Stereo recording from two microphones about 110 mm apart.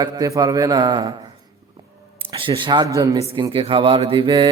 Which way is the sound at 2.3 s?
55° right (ahead or behind).